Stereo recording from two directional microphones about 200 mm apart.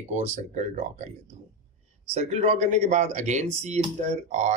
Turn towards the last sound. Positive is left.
turn(degrees=-35)  # may be behind; listen again after turning